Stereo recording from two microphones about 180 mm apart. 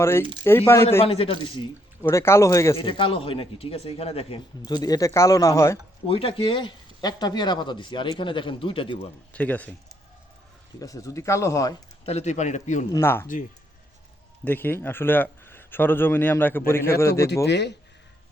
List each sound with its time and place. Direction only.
0.0 s speech: 15° left (ahead or behind)
1.0 s a man's voice: 30° left (ahead or behind)
2.0 s speech: 15° left (ahead or behind)
2.7 s speech: 30° left (ahead or behind)
6.1 s speech: 30° left (ahead or behind)
9.3 s speech: 10° left (ahead or behind)
10.8 s speech: 20° left (ahead or behind)
12.0 s a man's voice: 40° left (ahead or behind)
12.9 s speech: 15° left (ahead or behind)
14.4 s speech: 10° left (ahead or behind)
17.4 s speech: 70° left (ahead or behind)